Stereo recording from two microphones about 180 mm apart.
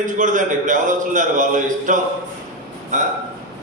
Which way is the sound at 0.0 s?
45° right (ahead or behind).